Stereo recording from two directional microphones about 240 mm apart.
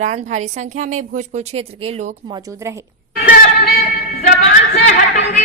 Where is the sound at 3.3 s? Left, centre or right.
Left.